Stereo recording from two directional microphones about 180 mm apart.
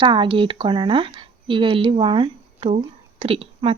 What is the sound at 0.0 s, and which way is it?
A woman's voice, 25° right (ahead or behind).